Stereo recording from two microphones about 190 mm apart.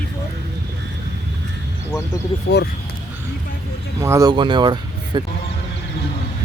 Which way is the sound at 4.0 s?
15° right (ahead or behind).